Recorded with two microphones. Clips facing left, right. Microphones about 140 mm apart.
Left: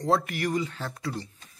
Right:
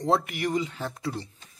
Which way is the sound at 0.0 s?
20° right (ahead or behind).